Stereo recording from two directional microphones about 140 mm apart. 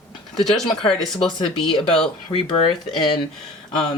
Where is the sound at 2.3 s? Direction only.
35° left (ahead or behind).